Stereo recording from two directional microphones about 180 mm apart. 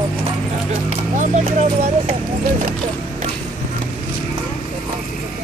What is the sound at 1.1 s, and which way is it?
Speech, 40° right (ahead or behind).